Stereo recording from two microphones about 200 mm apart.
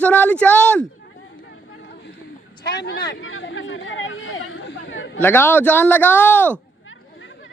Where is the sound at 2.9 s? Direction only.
75° left (ahead or behind).